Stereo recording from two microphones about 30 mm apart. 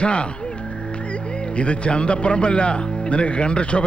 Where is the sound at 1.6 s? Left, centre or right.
Left.